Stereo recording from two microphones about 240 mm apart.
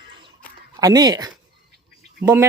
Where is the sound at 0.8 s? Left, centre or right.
Centre.